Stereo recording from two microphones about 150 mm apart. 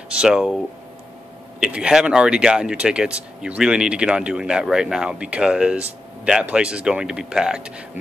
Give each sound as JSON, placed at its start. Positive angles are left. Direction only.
{"t": 0.1, "sound": "speech", "side_deg": -5}